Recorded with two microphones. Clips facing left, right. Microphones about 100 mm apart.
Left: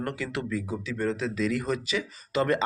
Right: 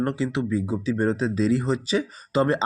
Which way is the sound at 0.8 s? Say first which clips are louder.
Right 6 dB; 35° right (ahead or behind).